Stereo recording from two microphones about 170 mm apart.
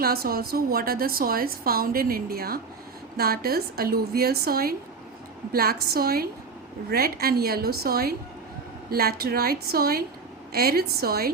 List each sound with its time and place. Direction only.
0.0 s a woman's voice: 65° right (ahead or behind)